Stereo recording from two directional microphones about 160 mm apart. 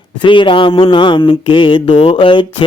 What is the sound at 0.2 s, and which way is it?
Speech, 30° left (ahead or behind).